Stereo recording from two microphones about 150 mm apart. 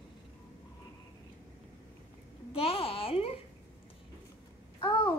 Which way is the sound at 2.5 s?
40° left (ahead or behind).